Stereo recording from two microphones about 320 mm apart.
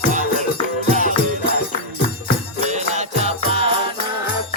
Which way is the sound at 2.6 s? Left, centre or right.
Right.